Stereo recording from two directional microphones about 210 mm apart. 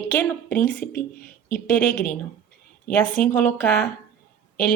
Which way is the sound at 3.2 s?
40° left (ahead or behind).